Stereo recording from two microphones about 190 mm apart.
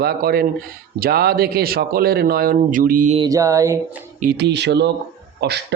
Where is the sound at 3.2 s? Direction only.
15° right (ahead or behind).